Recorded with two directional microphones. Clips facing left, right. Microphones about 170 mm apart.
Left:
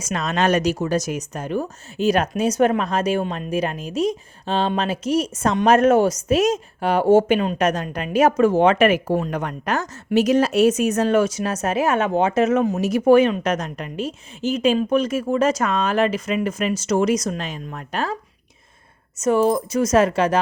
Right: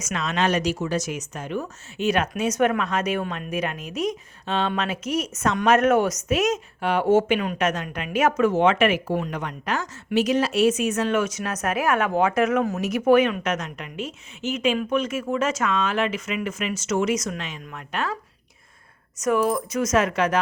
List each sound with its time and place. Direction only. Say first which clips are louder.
0.0 s speech: left 3 dB; 40° left (ahead or behind)
19.2 s speech: left 4 dB; 30° left (ahead or behind)